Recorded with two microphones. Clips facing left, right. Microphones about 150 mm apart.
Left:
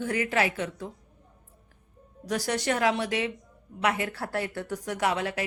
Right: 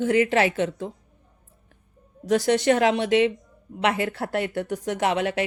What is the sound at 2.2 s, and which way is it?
A woman's voice, 20° right (ahead or behind).